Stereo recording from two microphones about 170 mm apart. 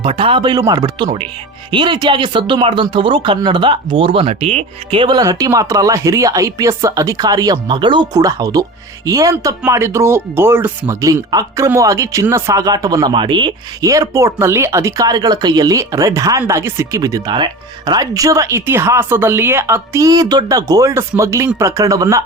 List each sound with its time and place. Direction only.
0.0 s speech: 35° right (ahead or behind)